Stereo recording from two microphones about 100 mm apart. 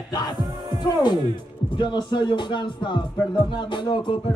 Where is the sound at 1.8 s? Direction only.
50° left (ahead or behind).